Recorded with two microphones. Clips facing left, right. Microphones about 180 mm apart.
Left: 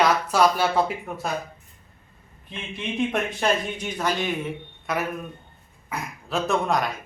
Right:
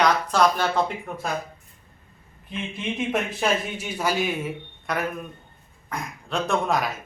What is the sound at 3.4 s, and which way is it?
A man's voice, 10° right (ahead or behind).